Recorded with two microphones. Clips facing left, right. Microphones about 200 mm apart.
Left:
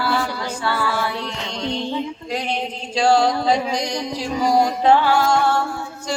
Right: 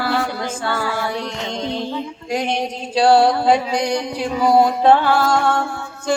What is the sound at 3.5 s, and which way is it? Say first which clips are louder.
Mantra: right 3 dB; 60° right (ahead or behind).